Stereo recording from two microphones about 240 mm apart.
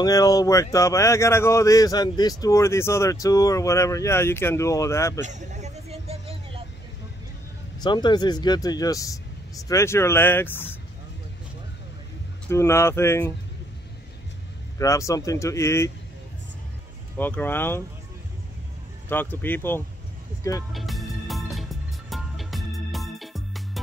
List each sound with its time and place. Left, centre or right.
0.0 s speech: centre
5.2 s a sound: right
7.8 s speech: centre
12.4 s speech: centre
14.8 s speech: centre
17.2 s speech: centre
19.0 s speech: centre
20.7 s music: centre